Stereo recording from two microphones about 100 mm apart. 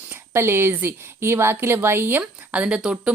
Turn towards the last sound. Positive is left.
turn(degrees=-10)  # may be behind; listen again after turning